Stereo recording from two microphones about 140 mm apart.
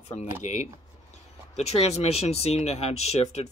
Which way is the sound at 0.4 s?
55° left (ahead or behind).